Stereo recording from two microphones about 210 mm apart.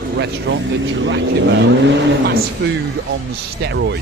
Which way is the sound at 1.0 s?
60° right (ahead or behind).